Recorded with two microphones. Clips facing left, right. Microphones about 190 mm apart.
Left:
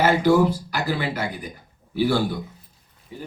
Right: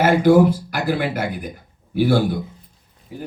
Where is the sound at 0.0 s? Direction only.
50° right (ahead or behind).